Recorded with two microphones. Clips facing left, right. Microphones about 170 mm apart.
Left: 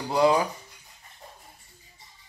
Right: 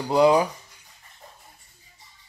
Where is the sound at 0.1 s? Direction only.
20° right (ahead or behind).